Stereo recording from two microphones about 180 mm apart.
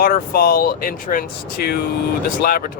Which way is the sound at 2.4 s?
50° left (ahead or behind).